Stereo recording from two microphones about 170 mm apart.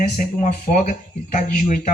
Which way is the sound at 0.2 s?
50° left (ahead or behind).